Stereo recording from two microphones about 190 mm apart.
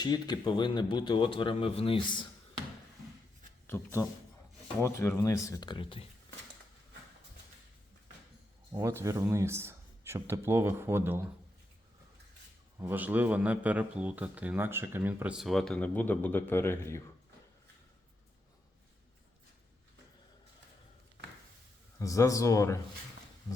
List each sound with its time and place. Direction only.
0.0 s speech: 20° left (ahead or behind)
3.7 s speech: 10° left (ahead or behind); by 6.1 s 30° left (ahead or behind)
8.7 s speech: 15° right (ahead or behind)
12.8 s speech: 10° right (ahead or behind); by 17.0 s 15° left (ahead or behind)
21.9 s speech: 15° left (ahead or behind)